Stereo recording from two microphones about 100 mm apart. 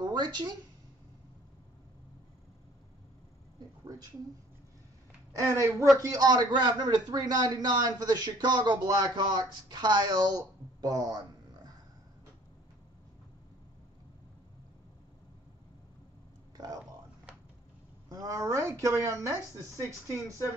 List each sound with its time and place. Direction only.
0.0 s speech: 45° right (ahead or behind)
5.3 s a man's voice: 30° right (ahead or behind)
16.5 s a sound: 40° right (ahead or behind)
18.1 s speech: 35° right (ahead or behind)